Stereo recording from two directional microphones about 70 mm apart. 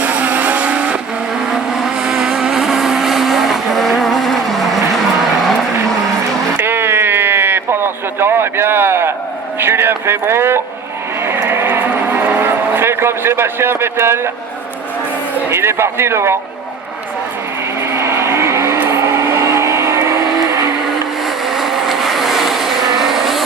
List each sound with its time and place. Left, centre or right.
0.0 s vehicle: right
2.0 s vehicle: centre
6.6 s a sound: right
9.6 s speech: right
11.2 s vehicle: right
15.4 s speech: right
17.7 s vehicle: right
21.2 s vehicle: centre